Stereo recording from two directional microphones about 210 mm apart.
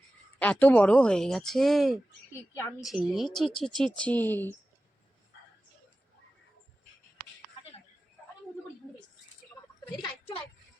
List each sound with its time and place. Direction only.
0.3 s speech: 5° left (ahead or behind)
10.0 s a child's voice: 25° left (ahead or behind)